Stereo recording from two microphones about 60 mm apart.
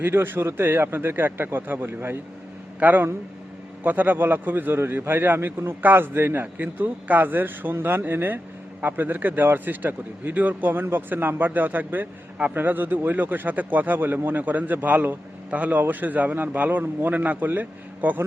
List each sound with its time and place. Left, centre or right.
0.0 s a man's voice: right